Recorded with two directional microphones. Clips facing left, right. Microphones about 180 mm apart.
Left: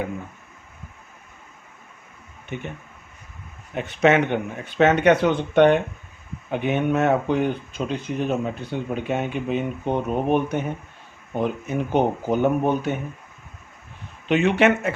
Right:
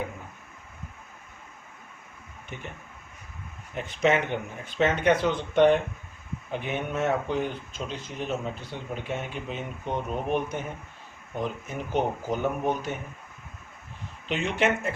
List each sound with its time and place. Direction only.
3.8 s speech: 65° left (ahead or behind)
9.0 s speech: 65° left (ahead or behind)
14.3 s speech: 65° left (ahead or behind)